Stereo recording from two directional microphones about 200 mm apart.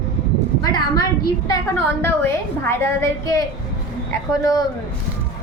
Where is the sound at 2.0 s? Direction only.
10° left (ahead or behind).